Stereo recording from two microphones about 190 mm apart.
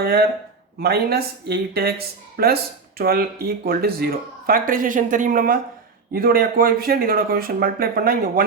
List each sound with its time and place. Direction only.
0.0 s speech: 55° right (ahead or behind)